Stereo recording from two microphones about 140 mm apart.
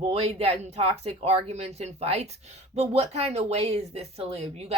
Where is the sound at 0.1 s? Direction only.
45° right (ahead or behind).